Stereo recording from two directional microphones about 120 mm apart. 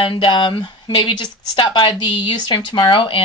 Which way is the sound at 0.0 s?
45° left (ahead or behind).